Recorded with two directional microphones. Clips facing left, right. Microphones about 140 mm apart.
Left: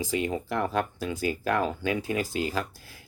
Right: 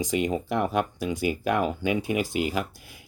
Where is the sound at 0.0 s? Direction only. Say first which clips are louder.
Right 3 dB; 20° right (ahead or behind).